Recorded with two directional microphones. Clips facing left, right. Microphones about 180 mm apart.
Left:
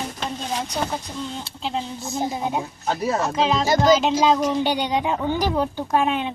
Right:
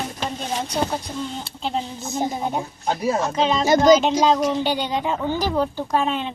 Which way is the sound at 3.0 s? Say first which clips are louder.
Right 1 dB; centre (ahead or behind).